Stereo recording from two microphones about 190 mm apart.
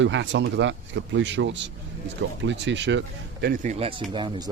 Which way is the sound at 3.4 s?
45° right (ahead or behind).